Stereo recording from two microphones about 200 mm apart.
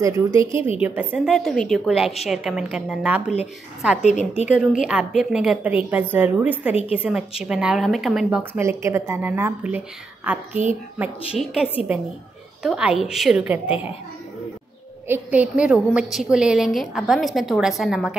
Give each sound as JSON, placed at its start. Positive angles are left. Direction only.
{"t": 0.0, "sound": "a woman's voice", "side_deg": -15}
{"t": 4.0, "sound": "a woman's voice", "side_deg": 35}
{"t": 4.8, "sound": "a woman's voice", "side_deg": -5}
{"t": 15.0, "sound": "a woman's voice", "side_deg": -10}